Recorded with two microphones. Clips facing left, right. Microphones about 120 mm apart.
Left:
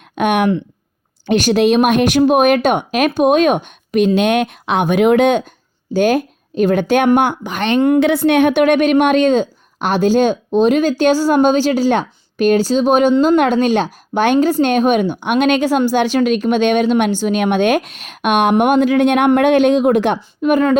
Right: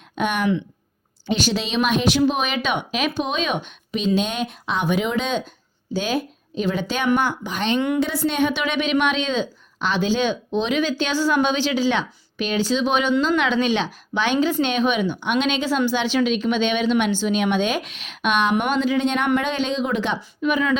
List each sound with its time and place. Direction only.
0.2 s a woman's voice: 60° left (ahead or behind)